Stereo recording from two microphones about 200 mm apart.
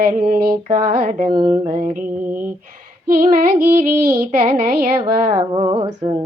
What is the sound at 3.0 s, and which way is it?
Speech, 45° right (ahead or behind).